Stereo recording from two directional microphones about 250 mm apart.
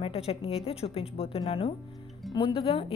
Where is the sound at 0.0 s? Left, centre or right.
Left.